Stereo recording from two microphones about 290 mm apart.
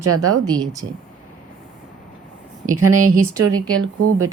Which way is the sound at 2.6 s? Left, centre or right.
Right.